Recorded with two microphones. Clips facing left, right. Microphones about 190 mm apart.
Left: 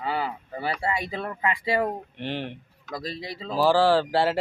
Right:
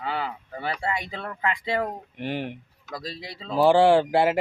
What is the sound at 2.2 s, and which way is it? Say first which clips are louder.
Speech: right 3 dB; 10° right (ahead or behind).